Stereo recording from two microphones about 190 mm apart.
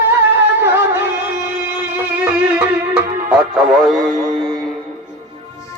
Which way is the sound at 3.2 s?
5° right (ahead or behind).